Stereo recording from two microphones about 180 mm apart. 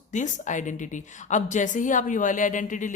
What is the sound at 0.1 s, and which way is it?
A woman's voice, 45° left (ahead or behind).